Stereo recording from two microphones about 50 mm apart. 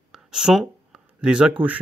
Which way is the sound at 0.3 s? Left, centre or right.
Centre.